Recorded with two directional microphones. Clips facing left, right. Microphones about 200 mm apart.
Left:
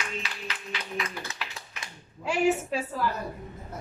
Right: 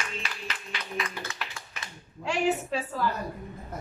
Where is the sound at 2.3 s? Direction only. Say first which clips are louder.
Left 2 dB; 10° left (ahead or behind).